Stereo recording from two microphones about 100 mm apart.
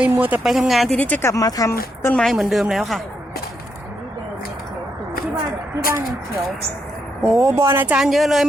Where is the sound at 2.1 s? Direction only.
5° left (ahead or behind).